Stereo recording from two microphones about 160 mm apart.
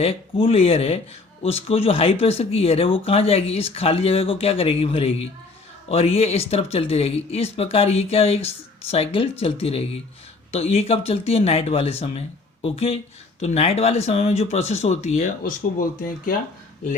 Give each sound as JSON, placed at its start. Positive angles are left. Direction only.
{"t": 0.0, "sound": "speech", "side_deg": 35}